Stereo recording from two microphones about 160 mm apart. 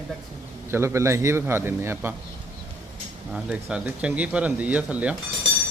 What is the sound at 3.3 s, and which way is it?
Speech, 5° right (ahead or behind).